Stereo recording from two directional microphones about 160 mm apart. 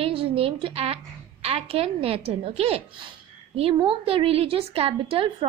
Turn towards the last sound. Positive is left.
turn(degrees=-35)  # may be behind; listen again after turning